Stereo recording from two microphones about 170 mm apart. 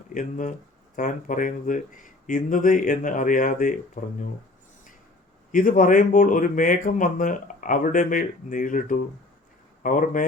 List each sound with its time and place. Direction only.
0.1 s speech: 50° left (ahead or behind)
5.5 s speech: 50° left (ahead or behind)